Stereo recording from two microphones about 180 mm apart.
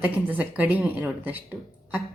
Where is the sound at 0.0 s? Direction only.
10° right (ahead or behind).